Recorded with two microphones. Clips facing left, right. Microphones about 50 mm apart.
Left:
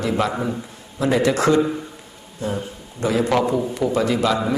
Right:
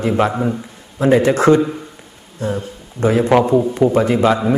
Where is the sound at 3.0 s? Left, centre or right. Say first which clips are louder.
Right 5 dB; right.